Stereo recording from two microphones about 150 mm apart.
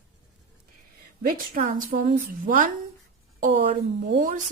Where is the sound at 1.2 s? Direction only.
65° right (ahead or behind).